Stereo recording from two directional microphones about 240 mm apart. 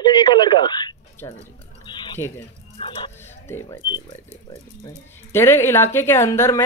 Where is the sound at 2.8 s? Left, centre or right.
Left.